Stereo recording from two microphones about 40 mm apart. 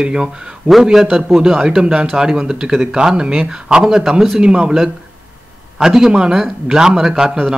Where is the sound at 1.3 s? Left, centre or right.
Centre.